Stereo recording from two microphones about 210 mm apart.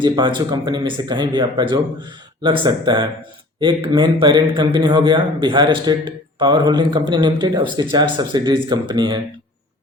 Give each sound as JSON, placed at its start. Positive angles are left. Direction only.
{"t": 0.0, "sound": "a man's voice", "side_deg": -20}